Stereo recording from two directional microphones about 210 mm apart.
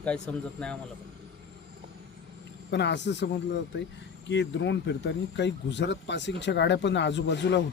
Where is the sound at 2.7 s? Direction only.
55° left (ahead or behind).